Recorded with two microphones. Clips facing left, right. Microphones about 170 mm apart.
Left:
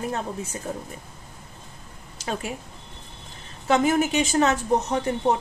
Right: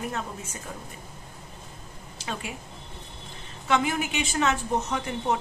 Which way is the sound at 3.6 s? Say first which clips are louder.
Left 5 dB; 40° left (ahead or behind).